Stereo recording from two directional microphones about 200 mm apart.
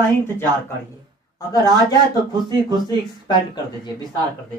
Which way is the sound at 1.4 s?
15° left (ahead or behind).